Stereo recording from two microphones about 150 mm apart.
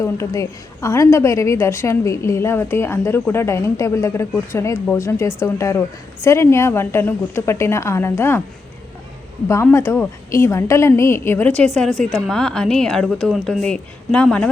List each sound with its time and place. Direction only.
0.0 s a woman's voice: 20° left (ahead or behind)
9.6 s a woman's voice: 15° left (ahead or behind)